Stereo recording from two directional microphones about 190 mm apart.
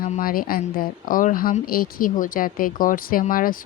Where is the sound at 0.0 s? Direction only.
50° left (ahead or behind).